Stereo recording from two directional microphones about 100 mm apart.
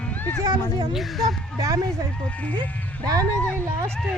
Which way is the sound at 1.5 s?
35° right (ahead or behind).